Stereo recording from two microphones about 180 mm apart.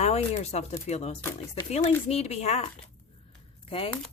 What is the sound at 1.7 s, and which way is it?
Speech, 35° left (ahead or behind).